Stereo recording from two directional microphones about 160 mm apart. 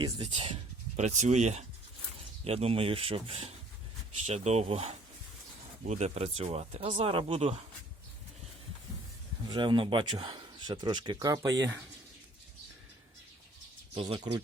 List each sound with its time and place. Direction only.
0.2 s speech: 35° right (ahead or behind)
9.5 s speech: 30° right (ahead or behind)
13.9 s speech: 30° right (ahead or behind)